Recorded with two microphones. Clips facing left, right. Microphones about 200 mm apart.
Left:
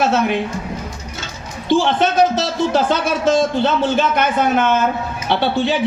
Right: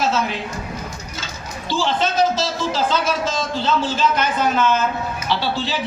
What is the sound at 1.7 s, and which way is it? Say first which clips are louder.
A man's voice: left 6 dB; 60° left (ahead or behind).